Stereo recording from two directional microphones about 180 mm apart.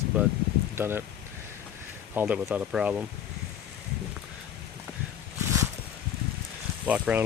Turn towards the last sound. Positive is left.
turn(degrees=-5)  # may be behind; listen again after turning